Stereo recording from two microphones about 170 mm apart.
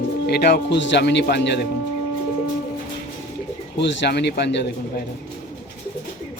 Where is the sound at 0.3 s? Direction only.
70° left (ahead or behind).